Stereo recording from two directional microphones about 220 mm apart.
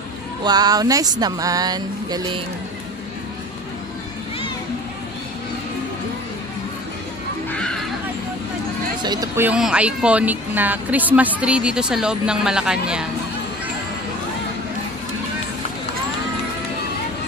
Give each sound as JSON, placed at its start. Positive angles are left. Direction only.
{"t": 0.4, "sound": "speech", "side_deg": -20}
{"t": 7.5, "sound": "neigh", "side_deg": 5}
{"t": 9.0, "sound": "speech", "side_deg": -15}